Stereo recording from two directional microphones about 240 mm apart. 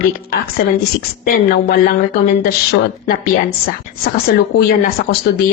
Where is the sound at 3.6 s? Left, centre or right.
Left.